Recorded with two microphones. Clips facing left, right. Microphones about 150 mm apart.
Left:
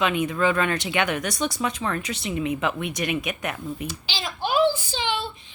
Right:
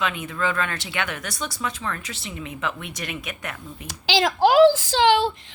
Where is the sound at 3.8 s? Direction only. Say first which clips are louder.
Right 9 dB; 90° right.